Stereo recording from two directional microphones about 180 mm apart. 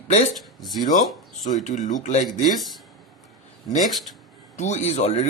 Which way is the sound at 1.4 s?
40° left (ahead or behind).